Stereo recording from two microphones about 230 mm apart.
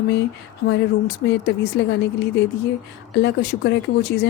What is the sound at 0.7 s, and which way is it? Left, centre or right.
Speech, left.